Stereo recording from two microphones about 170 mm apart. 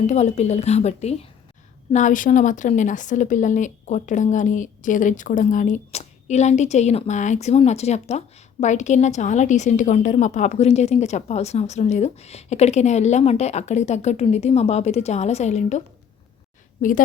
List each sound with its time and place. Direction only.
0.1 s a woman's voice: 40° left (ahead or behind)
16.8 s a woman's voice: 50° left (ahead or behind)